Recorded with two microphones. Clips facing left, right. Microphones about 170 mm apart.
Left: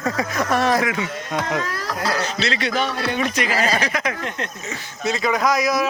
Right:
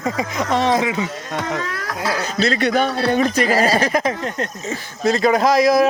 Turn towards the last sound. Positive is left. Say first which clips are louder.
# right 6 dB
turn(degrees=-30)  # may be behind; listen again after turning